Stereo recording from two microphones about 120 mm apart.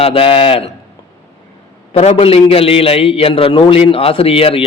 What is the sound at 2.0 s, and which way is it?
A man's voice, 55° left (ahead or behind).